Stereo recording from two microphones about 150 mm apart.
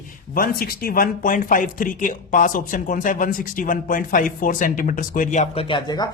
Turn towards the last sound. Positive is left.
turn(degrees=30)  # may be behind; listen again after turning